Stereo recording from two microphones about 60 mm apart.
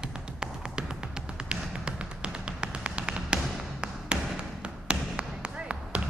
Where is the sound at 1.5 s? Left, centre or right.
Centre.